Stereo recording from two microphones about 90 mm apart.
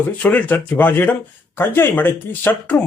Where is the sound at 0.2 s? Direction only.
15° left (ahead or behind).